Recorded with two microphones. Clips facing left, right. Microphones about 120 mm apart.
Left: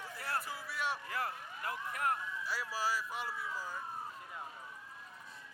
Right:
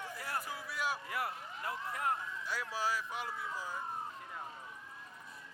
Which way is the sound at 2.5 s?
Centre (ahead or behind).